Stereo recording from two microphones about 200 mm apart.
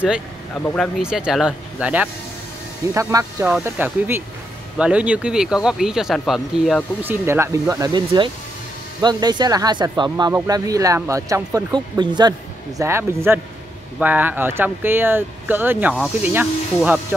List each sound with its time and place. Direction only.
0.7 s speech: centre (ahead or behind)